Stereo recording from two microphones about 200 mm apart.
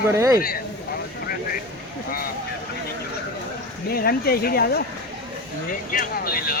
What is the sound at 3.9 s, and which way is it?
Speech, 50° left (ahead or behind).